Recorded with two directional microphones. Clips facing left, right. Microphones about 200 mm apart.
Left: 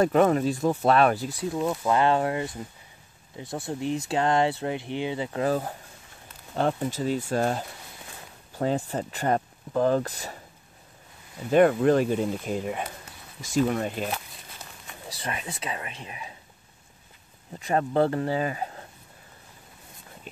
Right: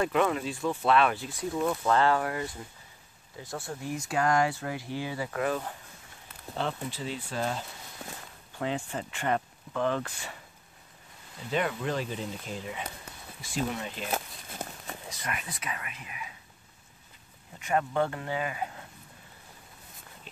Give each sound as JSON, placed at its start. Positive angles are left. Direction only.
{"t": 0.0, "sound": "speech", "side_deg": 40}
{"t": 1.5, "sound": "speech", "side_deg": 15}
{"t": 11.5, "sound": "speech", "side_deg": 50}
{"t": 14.1, "sound": "a sound", "side_deg": -45}
{"t": 15.0, "sound": "speech", "side_deg": 30}
{"t": 17.6, "sound": "speech", "side_deg": 35}